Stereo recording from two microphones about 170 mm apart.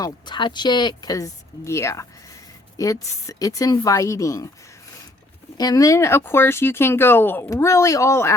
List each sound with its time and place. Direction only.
0.0 s speech: 25° left (ahead or behind)
5.5 s speech: 20° left (ahead or behind)